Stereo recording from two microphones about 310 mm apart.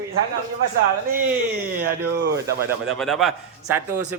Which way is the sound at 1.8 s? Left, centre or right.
Right.